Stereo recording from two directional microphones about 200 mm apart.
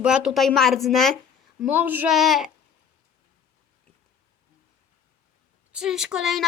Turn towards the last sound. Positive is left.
turn(degrees=0)  # may be behind; listen again after turning